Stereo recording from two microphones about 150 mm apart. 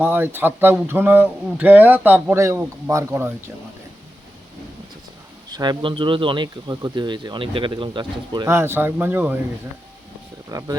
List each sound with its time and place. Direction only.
0.0 s speech: 15° right (ahead or behind)
5.5 s speech: 30° right (ahead or behind)
8.4 s speech: 15° right (ahead or behind)
10.5 s speech: 25° right (ahead or behind)